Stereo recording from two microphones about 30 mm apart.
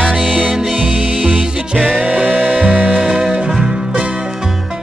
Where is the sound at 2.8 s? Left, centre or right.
Right.